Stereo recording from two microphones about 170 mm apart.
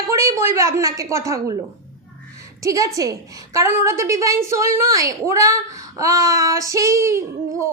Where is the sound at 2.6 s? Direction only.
20° right (ahead or behind).